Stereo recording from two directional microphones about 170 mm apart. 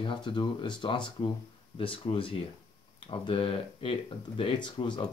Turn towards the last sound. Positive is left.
turn(degrees=25)  # may be behind; listen again after turning